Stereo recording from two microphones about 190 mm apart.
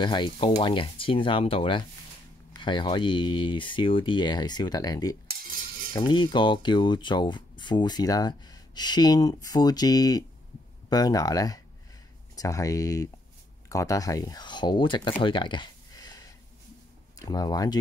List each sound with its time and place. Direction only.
0.0 s speech: 25° left (ahead or behind)
15.2 s a sound: 25° left (ahead or behind)
17.2 s speech: 20° left (ahead or behind)